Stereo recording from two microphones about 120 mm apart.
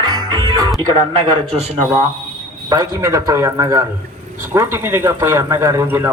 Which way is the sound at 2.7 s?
30° right (ahead or behind).